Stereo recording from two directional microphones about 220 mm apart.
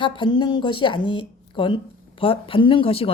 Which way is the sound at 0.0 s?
20° left (ahead or behind).